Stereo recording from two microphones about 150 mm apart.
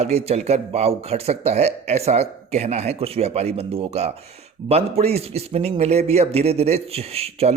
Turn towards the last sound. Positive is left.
turn(degrees=-45)  # may be behind; listen again after turning